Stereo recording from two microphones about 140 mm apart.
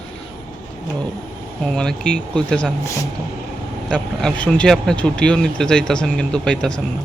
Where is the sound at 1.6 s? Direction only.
5° left (ahead or behind).